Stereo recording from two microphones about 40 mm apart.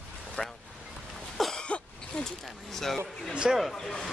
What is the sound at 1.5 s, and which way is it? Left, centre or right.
Throat clearing, left.